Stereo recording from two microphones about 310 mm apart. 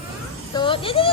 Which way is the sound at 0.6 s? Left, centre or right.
Centre.